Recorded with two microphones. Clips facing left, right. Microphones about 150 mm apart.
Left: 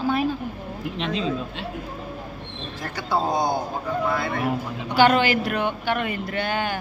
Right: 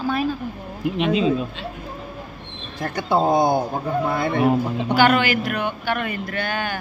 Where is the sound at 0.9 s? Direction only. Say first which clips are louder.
Right 7 dB; 10° right (ahead or behind).